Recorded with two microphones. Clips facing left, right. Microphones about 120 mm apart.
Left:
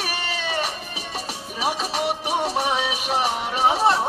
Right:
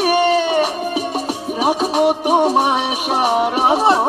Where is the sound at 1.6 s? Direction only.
50° right (ahead or behind).